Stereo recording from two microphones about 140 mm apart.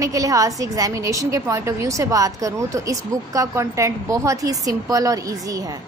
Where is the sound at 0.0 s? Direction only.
25° right (ahead or behind).